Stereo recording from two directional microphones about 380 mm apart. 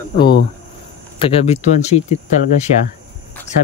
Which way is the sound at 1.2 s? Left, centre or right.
Centre.